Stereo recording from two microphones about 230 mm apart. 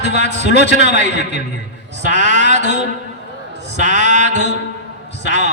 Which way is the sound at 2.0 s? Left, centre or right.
Right.